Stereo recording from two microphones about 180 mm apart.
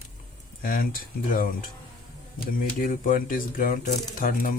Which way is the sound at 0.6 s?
50° left (ahead or behind).